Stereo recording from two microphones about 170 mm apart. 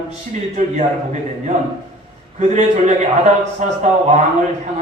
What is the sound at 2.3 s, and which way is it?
A man's voice, 45° right (ahead or behind).